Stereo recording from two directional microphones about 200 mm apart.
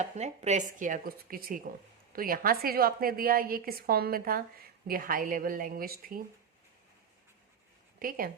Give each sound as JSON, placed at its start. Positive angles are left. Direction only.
{"t": 0.0, "sound": "a woman's voice", "side_deg": -35}
{"t": 7.9, "sound": "speech", "side_deg": -45}